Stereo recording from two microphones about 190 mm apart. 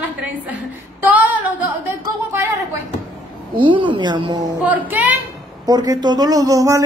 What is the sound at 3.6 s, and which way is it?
Speech, 25° right (ahead or behind).